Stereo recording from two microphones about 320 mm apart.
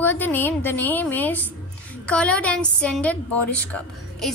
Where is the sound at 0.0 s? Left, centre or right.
Centre.